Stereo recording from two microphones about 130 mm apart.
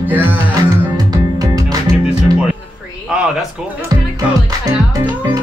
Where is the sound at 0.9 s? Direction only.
30° right (ahead or behind).